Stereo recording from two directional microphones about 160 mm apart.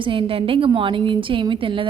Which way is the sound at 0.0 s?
30° right (ahead or behind).